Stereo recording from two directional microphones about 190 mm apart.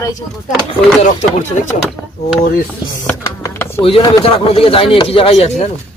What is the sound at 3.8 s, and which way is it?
Speech, 30° left (ahead or behind).